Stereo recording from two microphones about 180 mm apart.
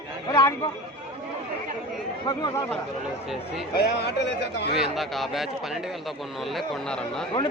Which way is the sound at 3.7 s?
65° left (ahead or behind).